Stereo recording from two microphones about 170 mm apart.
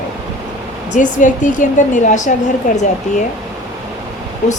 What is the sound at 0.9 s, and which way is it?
A woman's voice, 50° left (ahead or behind).